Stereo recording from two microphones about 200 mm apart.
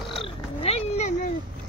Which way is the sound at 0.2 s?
30° left (ahead or behind).